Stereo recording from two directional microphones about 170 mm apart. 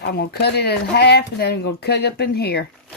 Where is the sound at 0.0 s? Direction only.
70° left (ahead or behind).